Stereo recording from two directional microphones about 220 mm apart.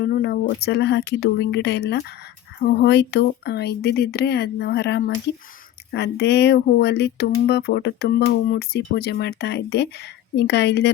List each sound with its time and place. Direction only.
0.0 s speech: 50° left (ahead or behind)